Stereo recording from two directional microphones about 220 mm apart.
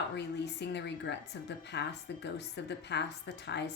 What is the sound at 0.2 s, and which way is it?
Speech, 50° left (ahead or behind).